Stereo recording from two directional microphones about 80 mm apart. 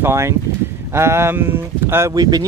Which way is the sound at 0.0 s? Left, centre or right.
Right.